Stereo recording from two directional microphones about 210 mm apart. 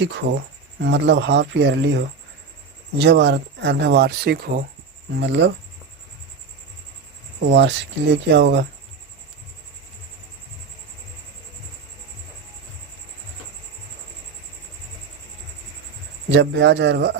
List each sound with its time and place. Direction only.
0.8 s speech: 55° right (ahead or behind)
7.3 s speech: 55° right (ahead or behind)
16.3 s speech: 60° right (ahead or behind)